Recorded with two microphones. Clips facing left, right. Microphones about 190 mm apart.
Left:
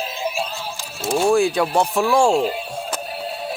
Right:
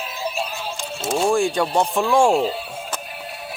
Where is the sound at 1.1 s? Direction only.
Centre (ahead or behind).